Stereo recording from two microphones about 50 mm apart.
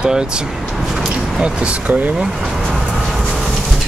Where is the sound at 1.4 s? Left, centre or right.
Right.